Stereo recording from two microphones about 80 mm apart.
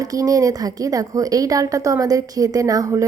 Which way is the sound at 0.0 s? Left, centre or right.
Right.